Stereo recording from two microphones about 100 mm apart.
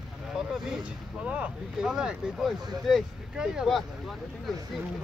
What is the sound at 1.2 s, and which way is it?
Speech, 10° right (ahead or behind).